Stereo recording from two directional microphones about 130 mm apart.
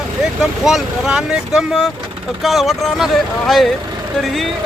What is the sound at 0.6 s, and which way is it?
Speech, 5° right (ahead or behind).